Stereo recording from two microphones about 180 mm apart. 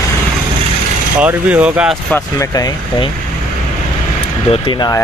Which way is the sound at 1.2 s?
5° right (ahead or behind).